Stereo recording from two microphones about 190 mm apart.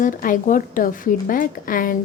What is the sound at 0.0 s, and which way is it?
A woman's voice, 45° left (ahead or behind).